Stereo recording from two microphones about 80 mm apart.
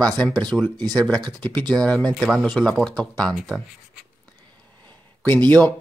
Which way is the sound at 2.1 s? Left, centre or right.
Centre.